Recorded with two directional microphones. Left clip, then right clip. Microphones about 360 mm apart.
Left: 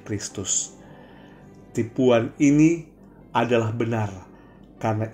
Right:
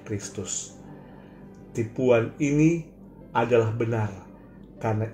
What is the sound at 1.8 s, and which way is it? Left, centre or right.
Speech, left.